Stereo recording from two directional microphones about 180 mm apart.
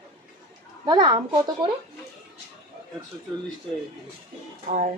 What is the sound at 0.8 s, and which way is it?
Speech, 25° right (ahead or behind).